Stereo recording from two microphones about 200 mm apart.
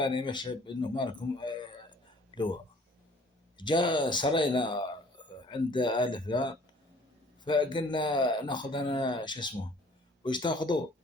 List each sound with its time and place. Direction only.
0.0 s speech: 25° left (ahead or behind)
3.6 s speech: 25° left (ahead or behind)